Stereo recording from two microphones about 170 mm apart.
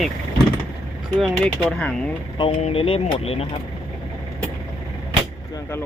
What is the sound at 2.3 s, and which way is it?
Speech, 35° left (ahead or behind).